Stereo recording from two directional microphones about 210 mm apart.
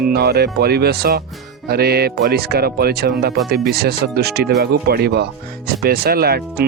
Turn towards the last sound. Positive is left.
turn(degrees=-45)  # may be behind; listen again after turning